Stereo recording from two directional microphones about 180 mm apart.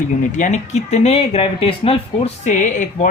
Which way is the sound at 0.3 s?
45° left (ahead or behind).